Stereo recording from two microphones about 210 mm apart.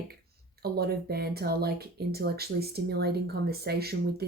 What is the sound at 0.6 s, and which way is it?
Speech, 50° right (ahead or behind).